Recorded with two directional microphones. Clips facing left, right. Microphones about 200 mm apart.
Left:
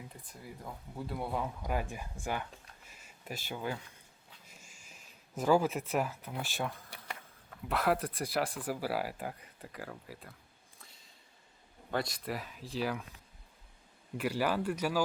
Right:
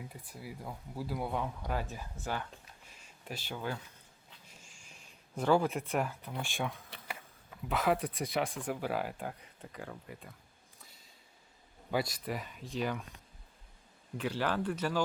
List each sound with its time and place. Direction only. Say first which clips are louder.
0.1 s speech: right 3 dB; 5° right (ahead or behind); by 2.5 s 10° left (ahead or behind)
2.5 s a sound: even; 5° left (ahead or behind)
7.7 s speech: even; centre (ahead or behind)
12.1 s speech: even; centre (ahead or behind)
14.2 s speech: left 1 dB; 10° left (ahead or behind)